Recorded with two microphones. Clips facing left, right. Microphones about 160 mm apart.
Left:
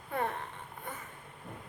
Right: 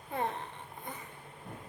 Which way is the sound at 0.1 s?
20° right (ahead or behind).